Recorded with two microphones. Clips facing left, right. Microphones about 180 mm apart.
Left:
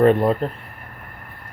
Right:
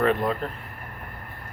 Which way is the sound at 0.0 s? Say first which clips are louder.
Left 7 dB; 35° left (ahead or behind).